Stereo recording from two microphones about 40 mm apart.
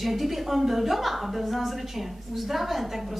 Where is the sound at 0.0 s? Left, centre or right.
Centre.